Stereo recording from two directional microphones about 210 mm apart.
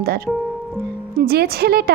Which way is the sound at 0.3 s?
Centre (ahead or behind).